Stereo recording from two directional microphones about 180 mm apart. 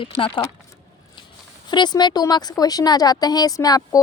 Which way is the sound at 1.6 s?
25° left (ahead or behind).